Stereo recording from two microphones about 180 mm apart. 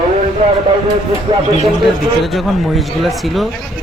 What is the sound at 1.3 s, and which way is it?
Speech, 30° right (ahead or behind).